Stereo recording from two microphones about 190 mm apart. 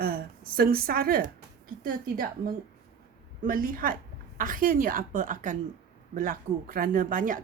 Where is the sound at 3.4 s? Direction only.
50° right (ahead or behind).